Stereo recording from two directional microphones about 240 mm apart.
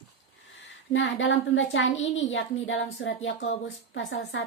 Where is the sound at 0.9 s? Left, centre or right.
Left.